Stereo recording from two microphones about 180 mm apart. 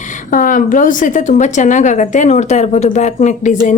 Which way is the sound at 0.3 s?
50° left (ahead or behind).